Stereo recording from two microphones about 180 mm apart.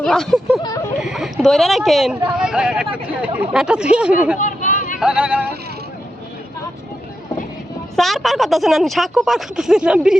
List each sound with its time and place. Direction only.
0.0 s a woman's voice: 5° left (ahead or behind)
4.4 s a sound: 45° left (ahead or behind)
4.9 s music: 5° right (ahead or behind)
7.9 s a woman's voice: centre (ahead or behind)